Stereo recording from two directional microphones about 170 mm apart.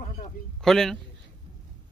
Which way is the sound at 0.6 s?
Centre (ahead or behind).